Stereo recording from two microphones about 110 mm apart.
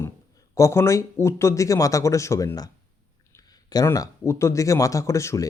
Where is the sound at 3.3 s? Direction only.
35° left (ahead or behind).